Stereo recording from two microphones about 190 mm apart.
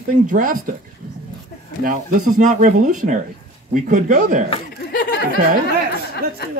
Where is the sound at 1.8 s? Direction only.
45° right (ahead or behind).